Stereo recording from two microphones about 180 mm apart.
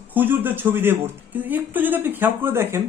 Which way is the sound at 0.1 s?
10° right (ahead or behind).